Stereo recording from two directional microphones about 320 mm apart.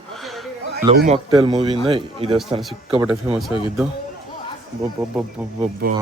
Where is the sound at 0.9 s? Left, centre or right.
Right.